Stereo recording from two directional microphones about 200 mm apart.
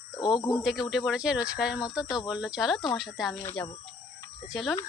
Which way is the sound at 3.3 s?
10° left (ahead or behind).